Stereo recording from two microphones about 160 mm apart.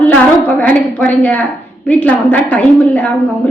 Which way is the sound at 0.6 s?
10° left (ahead or behind).